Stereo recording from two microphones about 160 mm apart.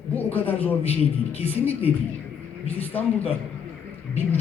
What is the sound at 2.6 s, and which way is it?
Speech, 10° left (ahead or behind).